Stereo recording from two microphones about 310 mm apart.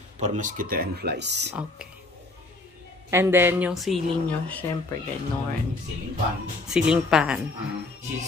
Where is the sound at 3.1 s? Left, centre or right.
Centre.